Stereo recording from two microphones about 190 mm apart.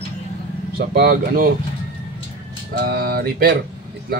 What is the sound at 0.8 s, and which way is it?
Speech, 55° right (ahead or behind).